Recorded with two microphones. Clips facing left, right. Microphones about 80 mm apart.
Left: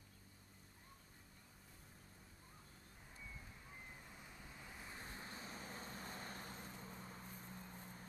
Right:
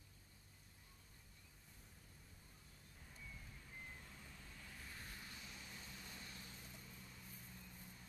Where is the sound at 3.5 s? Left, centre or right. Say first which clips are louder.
Even; left.